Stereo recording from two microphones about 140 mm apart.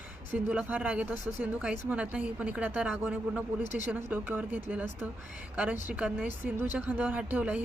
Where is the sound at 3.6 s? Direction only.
65° left (ahead or behind).